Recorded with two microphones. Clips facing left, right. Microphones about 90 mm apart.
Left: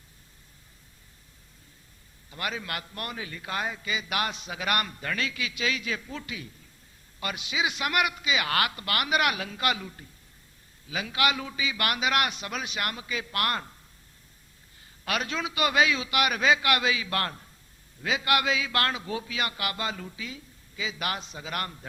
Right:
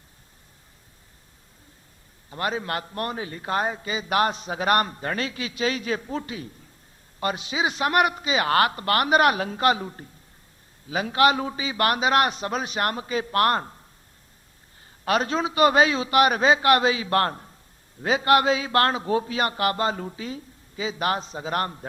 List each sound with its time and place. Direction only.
2.3 s a man's voice: 35° right (ahead or behind)
15.0 s a man's voice: 35° right (ahead or behind)